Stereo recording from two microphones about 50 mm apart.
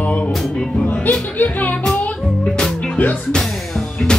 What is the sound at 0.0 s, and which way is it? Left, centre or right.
Music, left.